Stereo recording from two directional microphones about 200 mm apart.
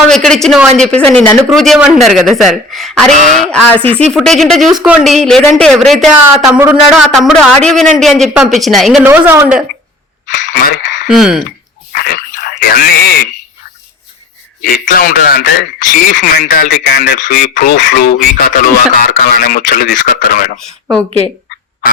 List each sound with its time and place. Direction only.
0.1 s a man's voice: 5° left (ahead or behind)
9.0 s a woman's voice: 10° right (ahead or behind)
10.2 s speech: 40° left (ahead or behind)
11.1 s a man's voice: 5° right (ahead or behind)
11.9 s a sound: 45° left (ahead or behind)
14.6 s speech: 45° left (ahead or behind)